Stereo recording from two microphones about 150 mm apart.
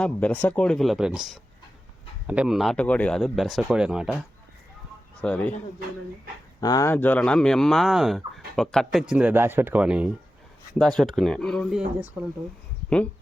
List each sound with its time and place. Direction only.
0.0 s speech: 10° left (ahead or behind)
5.2 s speech: 10° left (ahead or behind)
6.6 s speech: 25° left (ahead or behind)
6.9 s speech: 10° left (ahead or behind); by 10.1 s 10° right (ahead or behind)
10.8 s speech: 5° left (ahead or behind)